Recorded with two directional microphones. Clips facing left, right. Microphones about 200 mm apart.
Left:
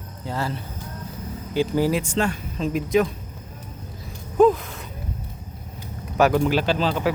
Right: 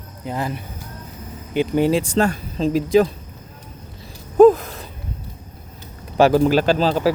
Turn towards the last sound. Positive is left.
turn(degrees=-40)  # may be behind; listen again after turning